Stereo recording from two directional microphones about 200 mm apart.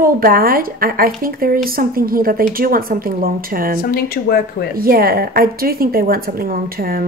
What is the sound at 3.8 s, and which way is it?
Speech, 50° left (ahead or behind).